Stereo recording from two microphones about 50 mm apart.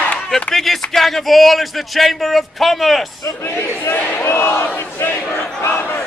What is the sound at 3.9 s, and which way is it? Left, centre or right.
Speech, left.